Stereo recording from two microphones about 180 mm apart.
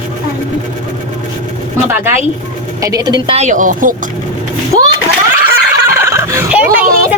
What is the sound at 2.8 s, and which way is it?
Speech, 20° right (ahead or behind).